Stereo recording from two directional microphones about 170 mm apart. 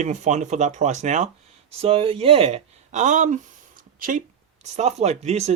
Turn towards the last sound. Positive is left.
turn(degrees=-40)  # may be behind; listen again after turning